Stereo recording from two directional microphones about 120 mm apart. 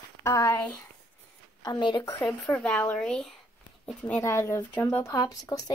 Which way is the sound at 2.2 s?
10° left (ahead or behind).